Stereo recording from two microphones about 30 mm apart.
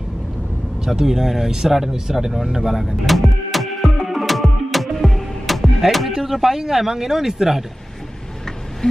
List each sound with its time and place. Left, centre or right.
0.8 s speech: centre
2.8 s music: centre
6.0 s speech: centre